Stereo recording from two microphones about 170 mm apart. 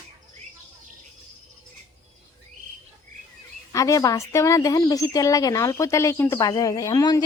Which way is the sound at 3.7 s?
20° left (ahead or behind).